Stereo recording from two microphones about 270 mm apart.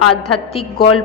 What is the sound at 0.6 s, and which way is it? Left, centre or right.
Speech, left.